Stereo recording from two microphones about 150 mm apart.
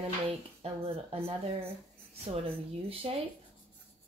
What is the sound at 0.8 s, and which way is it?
Speech, 40° right (ahead or behind).